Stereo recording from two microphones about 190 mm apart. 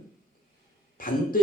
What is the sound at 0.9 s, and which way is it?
Speech, 50° left (ahead or behind).